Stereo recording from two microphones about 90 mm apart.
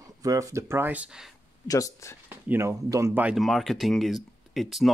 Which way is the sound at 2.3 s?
25° right (ahead or behind).